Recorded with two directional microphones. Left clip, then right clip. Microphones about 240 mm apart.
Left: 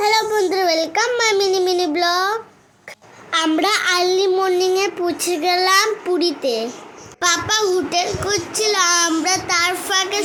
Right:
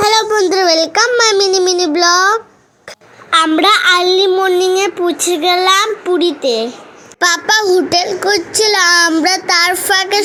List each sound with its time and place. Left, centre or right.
0.0 s a sound: centre
1.5 s child singing: centre
3.2 s a child's voice: centre
7.2 s a child's voice: right